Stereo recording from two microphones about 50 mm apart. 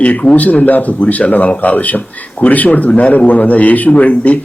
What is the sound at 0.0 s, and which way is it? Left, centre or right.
A man's voice, left.